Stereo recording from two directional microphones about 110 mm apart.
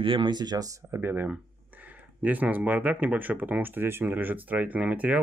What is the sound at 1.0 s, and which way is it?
Speech, 15° right (ahead or behind).